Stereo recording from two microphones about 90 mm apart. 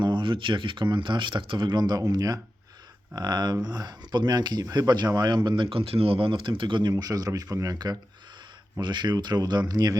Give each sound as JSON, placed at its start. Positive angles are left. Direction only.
{"t": 0.0, "sound": "speech", "side_deg": -60}
{"t": 6.9, "sound": "speech", "side_deg": -40}
{"t": 8.8, "sound": "speech", "side_deg": -55}